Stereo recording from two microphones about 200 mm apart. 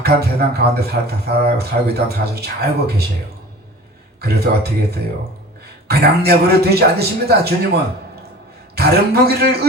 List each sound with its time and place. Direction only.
0.0 s speech: 55° right (ahead or behind)
4.2 s speech: 55° right (ahead or behind)